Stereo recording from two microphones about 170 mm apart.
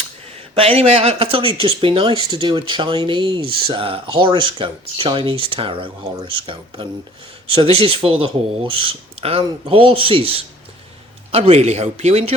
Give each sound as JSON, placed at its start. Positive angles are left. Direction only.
{"t": 0.5, "sound": "speech", "side_deg": -35}